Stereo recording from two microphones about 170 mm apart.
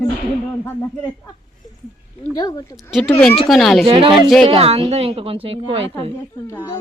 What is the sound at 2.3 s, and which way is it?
Speech, 20° left (ahead or behind).